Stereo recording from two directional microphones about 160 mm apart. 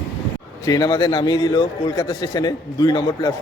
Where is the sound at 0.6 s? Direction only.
25° left (ahead or behind).